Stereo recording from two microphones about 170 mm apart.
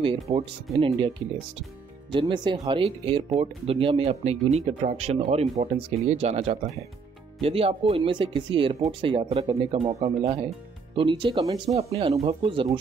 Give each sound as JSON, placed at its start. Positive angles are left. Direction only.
{"t": 0.0, "sound": "speech", "side_deg": -35}
{"t": 2.1, "sound": "speech", "side_deg": -30}